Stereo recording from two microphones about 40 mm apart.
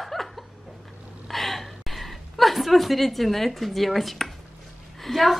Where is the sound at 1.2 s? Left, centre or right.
Centre.